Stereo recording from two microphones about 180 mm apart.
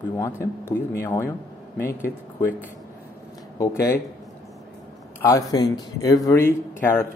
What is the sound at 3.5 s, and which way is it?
Speech, 15° left (ahead or behind).